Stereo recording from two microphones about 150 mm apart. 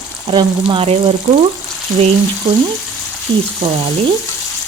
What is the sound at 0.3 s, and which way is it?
Speech, 30° right (ahead or behind).